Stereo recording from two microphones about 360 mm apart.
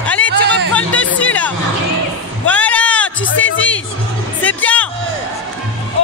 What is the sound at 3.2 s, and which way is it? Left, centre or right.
Music, left.